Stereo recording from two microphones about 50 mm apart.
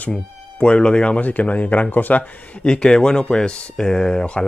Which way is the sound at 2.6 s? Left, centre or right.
Centre.